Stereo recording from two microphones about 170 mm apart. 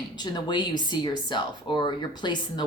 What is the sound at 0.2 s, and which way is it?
Speech, 25° left (ahead or behind).